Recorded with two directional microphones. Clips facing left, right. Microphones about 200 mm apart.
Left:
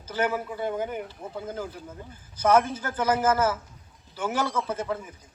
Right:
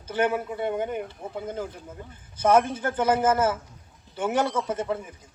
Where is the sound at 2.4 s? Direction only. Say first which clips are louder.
Right 1 dB; 25° right (ahead or behind).